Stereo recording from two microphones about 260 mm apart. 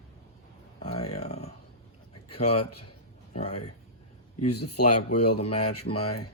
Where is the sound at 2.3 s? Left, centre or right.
Left.